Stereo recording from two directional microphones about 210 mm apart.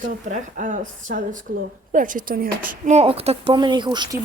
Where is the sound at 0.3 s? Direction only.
35° right (ahead or behind).